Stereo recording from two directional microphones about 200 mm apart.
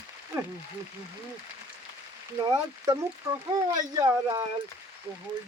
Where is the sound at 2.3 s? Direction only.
15° right (ahead or behind).